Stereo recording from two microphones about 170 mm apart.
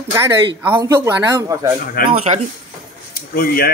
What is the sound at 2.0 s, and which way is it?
Speech, 55° left (ahead or behind).